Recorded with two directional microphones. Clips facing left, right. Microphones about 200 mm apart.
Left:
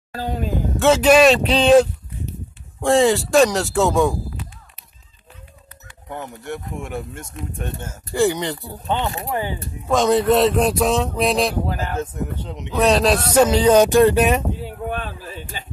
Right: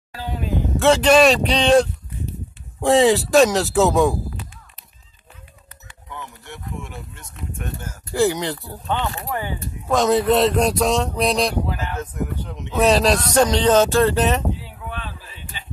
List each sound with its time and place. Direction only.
0.1 s a sound: 45° left (ahead or behind)
0.7 s speech: centre (ahead or behind)
6.0 s speech: 50° left (ahead or behind)
7.5 s speech: 25° left (ahead or behind)
8.1 s speech: centre (ahead or behind)
8.8 s speech: 20° left (ahead or behind)
9.8 s speech: centre (ahead or behind)
11.6 s speech: 45° left (ahead or behind)
12.0 s speech: 25° left (ahead or behind)
12.7 s speech: centre (ahead or behind)
14.6 s a sound: 50° left (ahead or behind)